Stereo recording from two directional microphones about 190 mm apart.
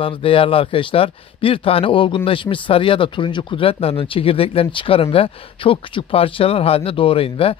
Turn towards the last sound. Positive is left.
turn(degrees=30)  # may be behind; listen again after turning